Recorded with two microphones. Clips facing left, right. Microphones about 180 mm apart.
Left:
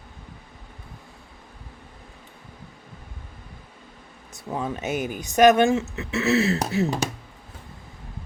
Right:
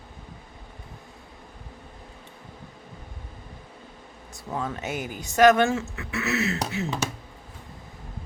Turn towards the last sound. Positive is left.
turn(degrees=35)  # may be behind; listen again after turning